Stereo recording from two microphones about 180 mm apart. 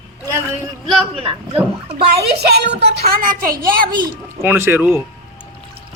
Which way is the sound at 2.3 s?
65° right (ahead or behind).